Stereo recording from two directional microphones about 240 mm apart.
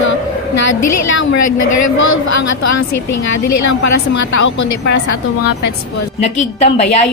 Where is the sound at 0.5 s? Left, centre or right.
Left.